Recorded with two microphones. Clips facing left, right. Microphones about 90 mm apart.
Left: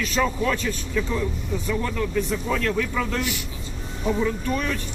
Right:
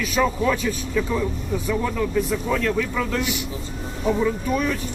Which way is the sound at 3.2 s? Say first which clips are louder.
Right 2 dB; 20° right (ahead or behind).